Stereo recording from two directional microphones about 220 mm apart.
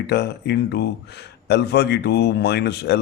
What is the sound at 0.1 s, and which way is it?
Speech, 50° left (ahead or behind).